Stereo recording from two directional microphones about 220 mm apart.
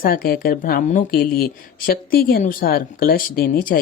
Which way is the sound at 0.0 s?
40° left (ahead or behind).